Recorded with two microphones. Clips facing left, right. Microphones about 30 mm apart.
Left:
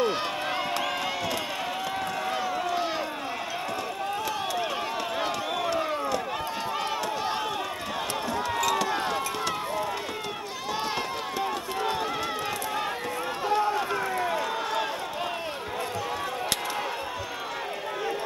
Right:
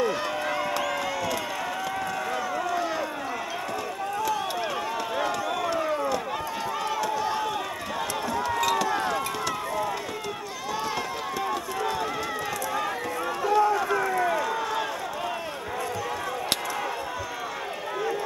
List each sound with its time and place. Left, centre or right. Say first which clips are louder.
0.0 s run: right 1 dB; left
5.9 s run: right 2 dB; centre
7.2 s run: right 2 dB; left
8.8 s run: right 2 dB; centre
11.8 s run: left 1 dB; left
13.4 s run: right 4 dB; left
13.7 s run: right 3 dB; left